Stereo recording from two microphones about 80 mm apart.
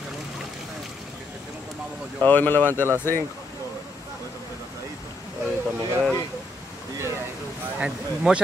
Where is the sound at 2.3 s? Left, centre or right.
Left.